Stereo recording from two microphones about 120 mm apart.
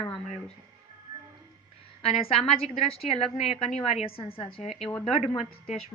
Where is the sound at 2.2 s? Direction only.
55° left (ahead or behind).